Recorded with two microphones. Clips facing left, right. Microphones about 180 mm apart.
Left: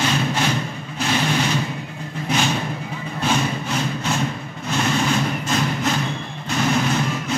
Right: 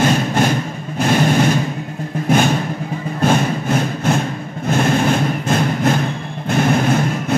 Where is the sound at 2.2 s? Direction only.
50° right (ahead or behind).